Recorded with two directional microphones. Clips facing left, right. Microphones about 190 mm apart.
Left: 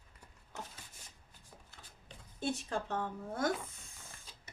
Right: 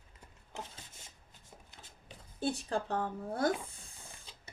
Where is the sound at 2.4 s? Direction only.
35° right (ahead or behind).